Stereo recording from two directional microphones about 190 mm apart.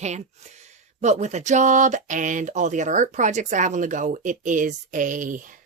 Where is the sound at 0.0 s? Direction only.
35° right (ahead or behind).